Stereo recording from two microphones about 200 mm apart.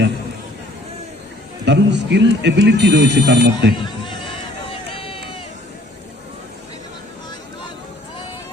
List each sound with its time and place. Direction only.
1.6 s speech: 60° right (ahead or behind)
3.8 s a sound: 25° left (ahead or behind)
4.7 s run: 25° left (ahead or behind)